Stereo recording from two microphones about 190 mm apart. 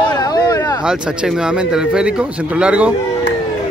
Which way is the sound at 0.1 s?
20° left (ahead or behind).